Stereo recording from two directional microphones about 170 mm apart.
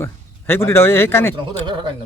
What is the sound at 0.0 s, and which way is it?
A man's voice, 15° left (ahead or behind).